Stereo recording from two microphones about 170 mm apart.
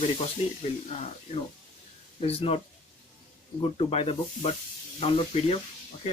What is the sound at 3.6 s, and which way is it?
Speech, 35° left (ahead or behind).